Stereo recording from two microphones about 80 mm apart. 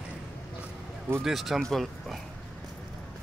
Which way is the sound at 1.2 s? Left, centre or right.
Centre.